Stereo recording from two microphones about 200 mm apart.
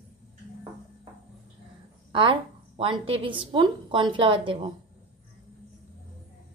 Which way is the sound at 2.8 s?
25° right (ahead or behind).